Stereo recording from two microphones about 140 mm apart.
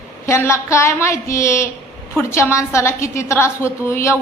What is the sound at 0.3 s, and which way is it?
A woman's voice, 20° left (ahead or behind).